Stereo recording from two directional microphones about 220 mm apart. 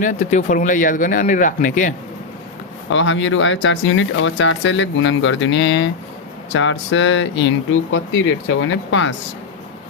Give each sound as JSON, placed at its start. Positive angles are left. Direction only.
{"t": 0.0, "sound": "speech", "side_deg": 35}
{"t": 2.9, "sound": "speech", "side_deg": 60}